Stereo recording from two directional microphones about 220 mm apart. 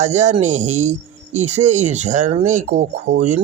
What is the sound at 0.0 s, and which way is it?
Speech, 30° right (ahead or behind).